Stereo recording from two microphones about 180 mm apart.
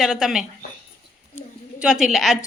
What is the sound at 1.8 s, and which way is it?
Speech, 5° right (ahead or behind).